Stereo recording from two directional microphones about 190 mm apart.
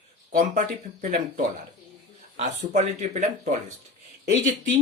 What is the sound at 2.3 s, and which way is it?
Speech, 40° right (ahead or behind).